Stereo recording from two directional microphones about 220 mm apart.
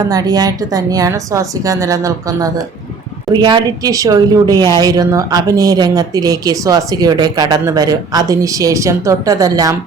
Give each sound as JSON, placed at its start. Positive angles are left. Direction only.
{"t": 0.0, "sound": "speech", "side_deg": -15}